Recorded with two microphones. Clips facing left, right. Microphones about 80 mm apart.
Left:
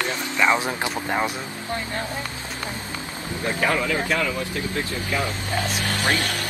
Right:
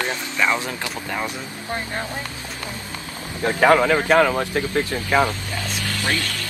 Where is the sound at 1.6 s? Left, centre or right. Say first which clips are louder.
Right 1 dB; right.